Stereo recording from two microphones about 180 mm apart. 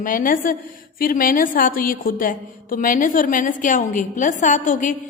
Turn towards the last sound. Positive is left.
turn(degrees=45)  # may be behind; listen again after turning